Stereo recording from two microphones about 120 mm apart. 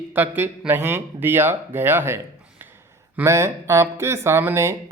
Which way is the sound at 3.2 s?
25° right (ahead or behind).